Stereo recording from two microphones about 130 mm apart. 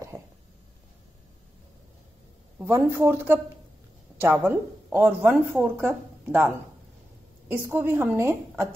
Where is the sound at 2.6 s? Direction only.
20° right (ahead or behind).